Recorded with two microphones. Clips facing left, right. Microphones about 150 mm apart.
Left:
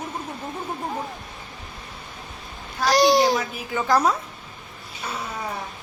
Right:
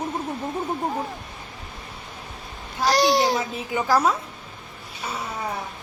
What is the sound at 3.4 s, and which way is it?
Speech, 25° right (ahead or behind).